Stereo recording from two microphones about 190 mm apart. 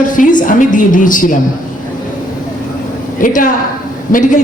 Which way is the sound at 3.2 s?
45° left (ahead or behind).